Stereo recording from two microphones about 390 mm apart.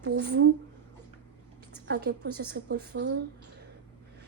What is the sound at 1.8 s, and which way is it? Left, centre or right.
Speech, right.